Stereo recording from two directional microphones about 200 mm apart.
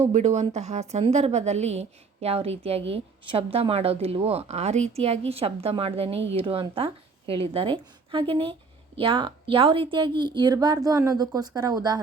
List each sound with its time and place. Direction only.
0.0 s a woman's voice: 35° right (ahead or behind); by 11.9 s 20° right (ahead or behind)